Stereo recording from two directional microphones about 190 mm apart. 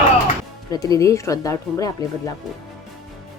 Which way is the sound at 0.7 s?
20° left (ahead or behind).